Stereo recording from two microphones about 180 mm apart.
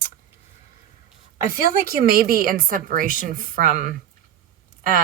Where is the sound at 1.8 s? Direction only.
55° right (ahead or behind).